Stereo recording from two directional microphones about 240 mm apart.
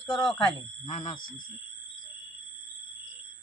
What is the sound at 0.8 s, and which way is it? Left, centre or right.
Speech, left.